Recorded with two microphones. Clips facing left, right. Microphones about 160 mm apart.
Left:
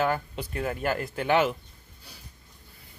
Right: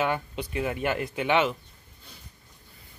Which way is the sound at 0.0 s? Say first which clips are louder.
Left 1 dB; centre (ahead or behind).